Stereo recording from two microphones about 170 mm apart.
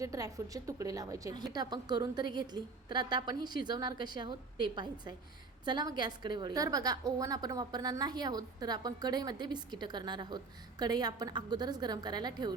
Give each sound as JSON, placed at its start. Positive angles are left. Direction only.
{"t": 0.0, "sound": "a woman's voice", "side_deg": -20}